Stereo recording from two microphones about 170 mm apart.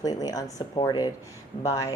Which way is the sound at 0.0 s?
25° left (ahead or behind).